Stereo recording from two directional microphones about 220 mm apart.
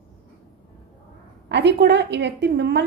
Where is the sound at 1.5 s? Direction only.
50° right (ahead or behind).